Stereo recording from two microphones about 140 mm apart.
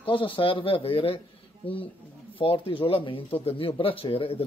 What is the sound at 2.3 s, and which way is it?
Speech, 40° left (ahead or behind).